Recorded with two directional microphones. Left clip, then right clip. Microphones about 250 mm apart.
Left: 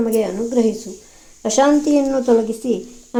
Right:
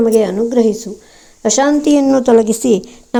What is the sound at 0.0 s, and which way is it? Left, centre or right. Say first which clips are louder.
A woman's voice: right 7 dB; right.